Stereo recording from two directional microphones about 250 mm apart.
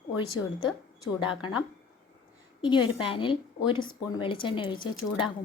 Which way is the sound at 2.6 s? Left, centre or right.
Centre.